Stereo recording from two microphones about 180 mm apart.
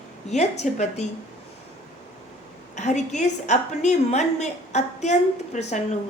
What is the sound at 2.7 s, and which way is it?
A woman's voice, 40° left (ahead or behind).